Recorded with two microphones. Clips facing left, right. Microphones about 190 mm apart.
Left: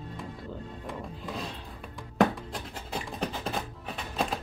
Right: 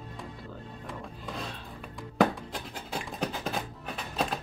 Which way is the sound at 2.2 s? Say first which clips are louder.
Even; centre (ahead or behind).